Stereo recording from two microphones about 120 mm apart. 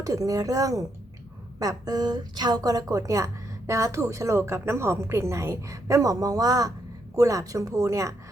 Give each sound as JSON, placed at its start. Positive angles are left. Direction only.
{"t": 0.0, "sound": "a woman's voice", "side_deg": -30}